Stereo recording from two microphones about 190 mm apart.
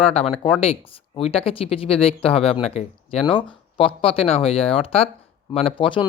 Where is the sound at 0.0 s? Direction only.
30° left (ahead or behind).